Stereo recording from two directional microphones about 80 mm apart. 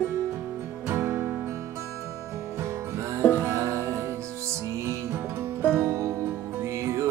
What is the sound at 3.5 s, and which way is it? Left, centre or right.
Music, right.